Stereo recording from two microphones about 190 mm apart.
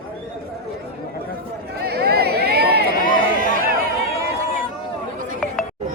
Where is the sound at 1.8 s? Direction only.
55° right (ahead or behind).